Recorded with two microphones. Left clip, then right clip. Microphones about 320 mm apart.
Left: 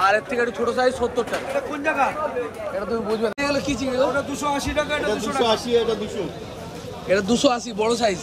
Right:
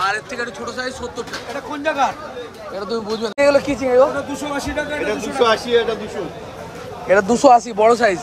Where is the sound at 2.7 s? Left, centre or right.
Centre.